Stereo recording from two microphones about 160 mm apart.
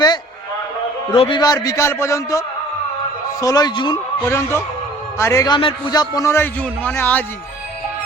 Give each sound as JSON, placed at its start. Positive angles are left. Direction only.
{"t": 1.1, "sound": "a man's voice", "side_deg": 35}
{"t": 3.4, "sound": "a man's voice", "side_deg": 25}
{"t": 4.2, "sound": "a man's voice", "side_deg": 15}
{"t": 5.5, "sound": "a man's voice", "side_deg": 30}